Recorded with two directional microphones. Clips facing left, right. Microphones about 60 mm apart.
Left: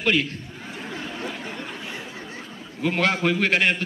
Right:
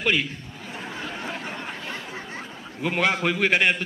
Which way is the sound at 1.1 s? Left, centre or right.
Right.